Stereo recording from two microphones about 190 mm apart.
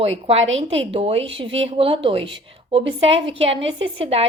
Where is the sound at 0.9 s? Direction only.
30° right (ahead or behind).